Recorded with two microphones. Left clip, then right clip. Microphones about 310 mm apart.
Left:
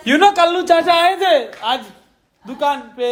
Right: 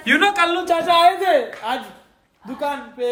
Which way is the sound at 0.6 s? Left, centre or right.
Left.